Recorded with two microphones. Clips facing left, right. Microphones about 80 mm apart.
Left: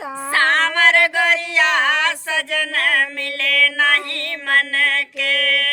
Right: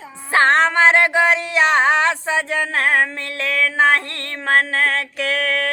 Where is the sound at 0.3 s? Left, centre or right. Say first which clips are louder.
Right 3 dB; right.